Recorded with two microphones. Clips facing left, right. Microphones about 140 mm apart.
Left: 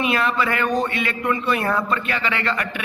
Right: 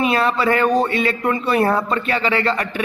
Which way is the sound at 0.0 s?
35° right (ahead or behind).